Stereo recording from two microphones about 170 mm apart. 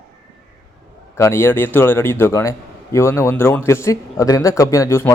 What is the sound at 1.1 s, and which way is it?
A man's voice, 15° left (ahead or behind).